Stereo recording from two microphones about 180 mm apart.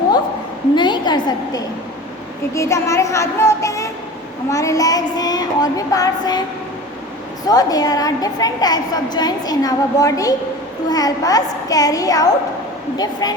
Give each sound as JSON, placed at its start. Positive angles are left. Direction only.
{"t": 0.8, "sound": "a sound", "side_deg": 25}
{"t": 2.5, "sound": "child singing", "side_deg": 15}
{"t": 4.4, "sound": "a woman's voice", "side_deg": 15}
{"t": 7.4, "sound": "a woman's voice", "side_deg": 20}